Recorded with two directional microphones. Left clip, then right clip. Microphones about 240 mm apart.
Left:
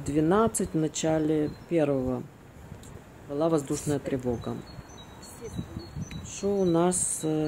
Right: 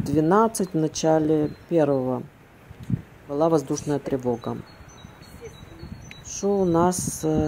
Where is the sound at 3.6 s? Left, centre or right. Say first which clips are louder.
Right 4 dB; centre.